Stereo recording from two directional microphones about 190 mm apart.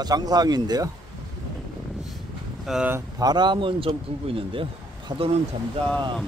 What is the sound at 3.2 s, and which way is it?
Speech, 20° right (ahead or behind).